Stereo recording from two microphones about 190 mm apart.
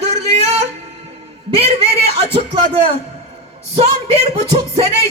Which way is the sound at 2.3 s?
30° right (ahead or behind).